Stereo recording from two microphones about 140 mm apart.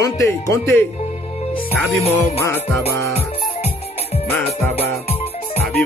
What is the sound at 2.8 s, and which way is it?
Music, 45° left (ahead or behind).